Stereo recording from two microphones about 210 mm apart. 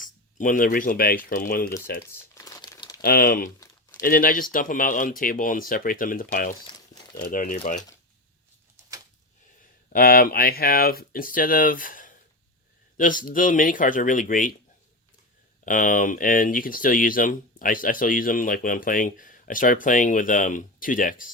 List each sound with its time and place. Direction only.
0.3 s speech: 40° left (ahead or behind)
2.0 s crumpling: 15° left (ahead or behind)
3.0 s speech: 45° left (ahead or behind)
6.7 s crumpling: 20° left (ahead or behind)
7.2 s speech: 40° left (ahead or behind)
9.9 s speech: 45° left (ahead or behind)
15.6 s speech: 40° left (ahead or behind)